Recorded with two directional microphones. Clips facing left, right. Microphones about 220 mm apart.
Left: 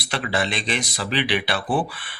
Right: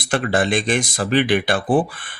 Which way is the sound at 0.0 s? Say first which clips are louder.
Right 6 dB; 50° right (ahead or behind).